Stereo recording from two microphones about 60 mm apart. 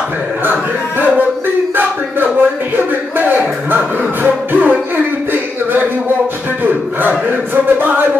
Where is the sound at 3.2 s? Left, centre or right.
Right.